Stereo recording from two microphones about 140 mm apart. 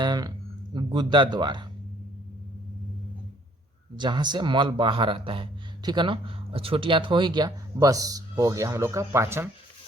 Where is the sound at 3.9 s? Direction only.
30° right (ahead or behind).